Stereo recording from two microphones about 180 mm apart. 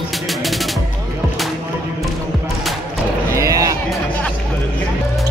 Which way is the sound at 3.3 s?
20° right (ahead or behind).